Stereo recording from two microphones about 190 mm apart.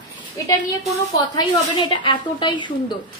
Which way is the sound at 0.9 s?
25° left (ahead or behind).